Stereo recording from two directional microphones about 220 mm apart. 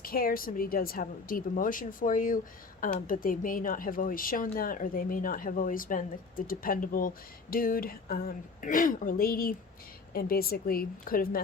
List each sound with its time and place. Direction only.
0.0 s speech: 40° left (ahead or behind)